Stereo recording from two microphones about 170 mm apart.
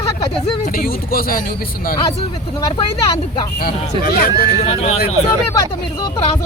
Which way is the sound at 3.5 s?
60° left (ahead or behind).